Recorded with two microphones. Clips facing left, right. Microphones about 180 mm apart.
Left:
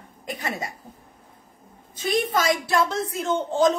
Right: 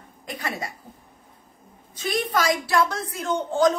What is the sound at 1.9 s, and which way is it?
A woman's voice, 25° left (ahead or behind).